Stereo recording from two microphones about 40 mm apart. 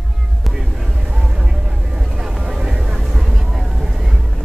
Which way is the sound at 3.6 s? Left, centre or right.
Centre.